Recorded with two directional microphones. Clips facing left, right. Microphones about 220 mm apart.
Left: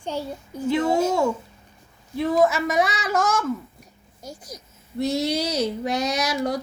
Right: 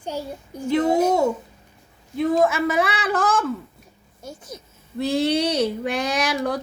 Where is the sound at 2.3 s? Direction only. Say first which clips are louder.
Even; 30° right (ahead or behind).